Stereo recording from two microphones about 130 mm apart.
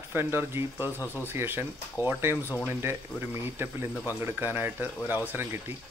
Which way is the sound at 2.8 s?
15° right (ahead or behind).